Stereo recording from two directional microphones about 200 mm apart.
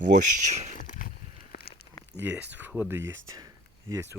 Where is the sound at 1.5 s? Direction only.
55° left (ahead or behind).